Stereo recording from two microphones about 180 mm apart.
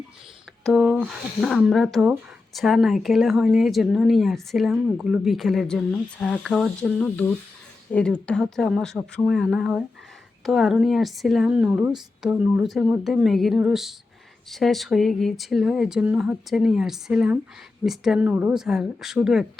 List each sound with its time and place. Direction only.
0.6 s speech: centre (ahead or behind)